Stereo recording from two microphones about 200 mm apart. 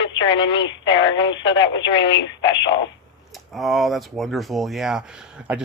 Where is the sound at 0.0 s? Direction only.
65° left (ahead or behind).